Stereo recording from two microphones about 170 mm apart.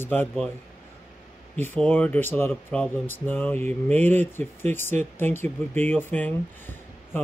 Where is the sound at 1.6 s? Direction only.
10° left (ahead or behind).